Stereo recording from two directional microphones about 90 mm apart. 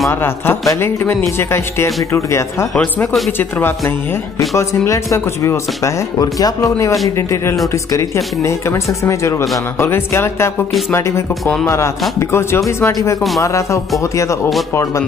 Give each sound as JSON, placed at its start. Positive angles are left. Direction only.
{"t": 0.1, "sound": "speech", "side_deg": 25}
{"t": 4.6, "sound": "speech", "side_deg": 35}